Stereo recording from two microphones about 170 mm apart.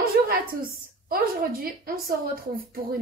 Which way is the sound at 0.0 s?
65° right (ahead or behind).